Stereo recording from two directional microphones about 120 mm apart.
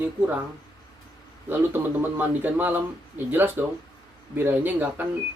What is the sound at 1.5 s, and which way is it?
Speech, 15° right (ahead or behind).